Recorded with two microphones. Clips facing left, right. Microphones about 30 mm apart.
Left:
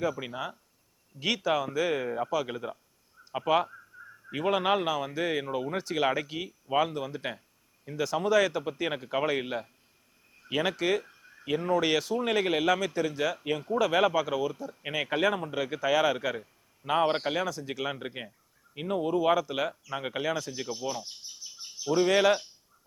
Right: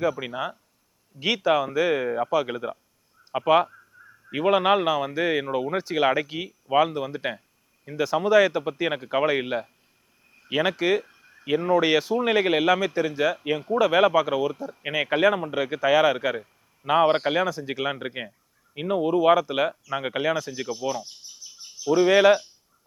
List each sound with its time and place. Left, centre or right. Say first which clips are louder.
0.0 s speech: right 5 dB; centre
3.9 s a sound: left 2 dB; centre
4.3 s speech: right 6 dB; right
20.3 s speech: right 5 dB; centre
21.8 s speech: right 6 dB; centre